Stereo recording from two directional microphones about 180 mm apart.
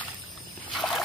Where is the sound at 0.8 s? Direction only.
Centre (ahead or behind).